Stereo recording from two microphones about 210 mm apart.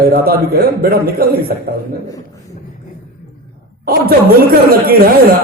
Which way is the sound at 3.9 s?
45° right (ahead or behind).